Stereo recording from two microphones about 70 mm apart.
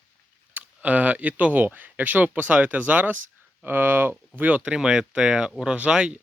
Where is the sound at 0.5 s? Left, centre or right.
Right.